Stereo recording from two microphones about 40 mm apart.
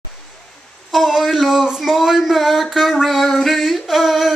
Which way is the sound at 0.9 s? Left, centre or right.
Centre.